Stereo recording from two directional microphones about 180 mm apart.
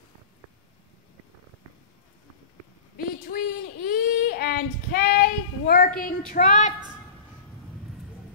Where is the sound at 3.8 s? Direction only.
55° left (ahead or behind).